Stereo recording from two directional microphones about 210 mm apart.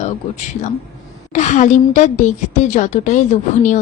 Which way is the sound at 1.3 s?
35° left (ahead or behind).